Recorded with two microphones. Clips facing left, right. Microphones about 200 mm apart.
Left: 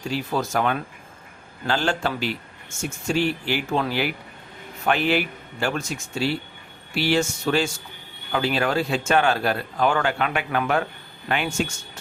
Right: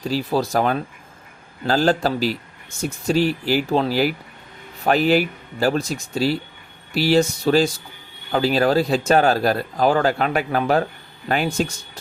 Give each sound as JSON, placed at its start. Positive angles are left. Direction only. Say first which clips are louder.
{"t": 0.0, "sound": "speech", "louder": "right 4 dB", "side_deg": -35}